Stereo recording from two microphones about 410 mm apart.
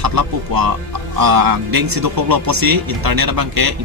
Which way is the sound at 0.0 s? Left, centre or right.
Right.